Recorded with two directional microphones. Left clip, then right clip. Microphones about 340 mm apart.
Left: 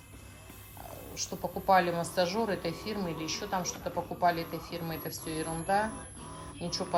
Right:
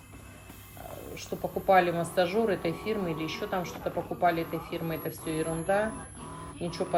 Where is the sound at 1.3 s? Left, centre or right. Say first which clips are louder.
Right 4 dB; left.